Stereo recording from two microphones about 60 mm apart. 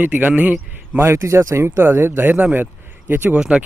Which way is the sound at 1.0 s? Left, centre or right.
Right.